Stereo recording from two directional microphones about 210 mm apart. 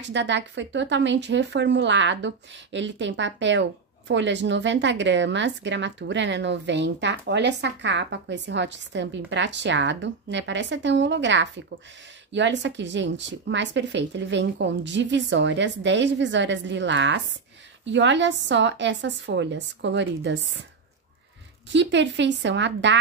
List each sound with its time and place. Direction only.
0.0 s a woman's voice: 60° right (ahead or behind)
21.6 s a woman's voice: 55° right (ahead or behind)